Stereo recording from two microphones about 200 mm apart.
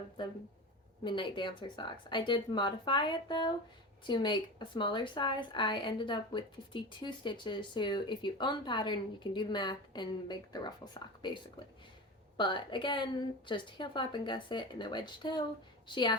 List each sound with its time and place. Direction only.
0.2 s a woman's voice: 25° left (ahead or behind)
12.4 s a woman's voice: 25° left (ahead or behind)